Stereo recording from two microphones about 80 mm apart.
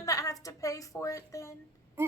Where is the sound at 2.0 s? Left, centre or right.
Right.